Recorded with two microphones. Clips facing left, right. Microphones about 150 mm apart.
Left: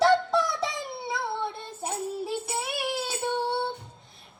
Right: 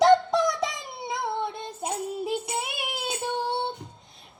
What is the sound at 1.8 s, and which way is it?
Music, 15° right (ahead or behind).